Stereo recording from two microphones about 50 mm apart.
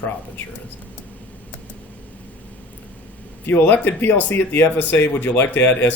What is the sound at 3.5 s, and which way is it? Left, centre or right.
Speech, left.